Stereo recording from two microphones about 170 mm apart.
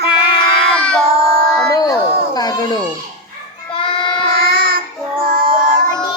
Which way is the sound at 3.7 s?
30° left (ahead or behind).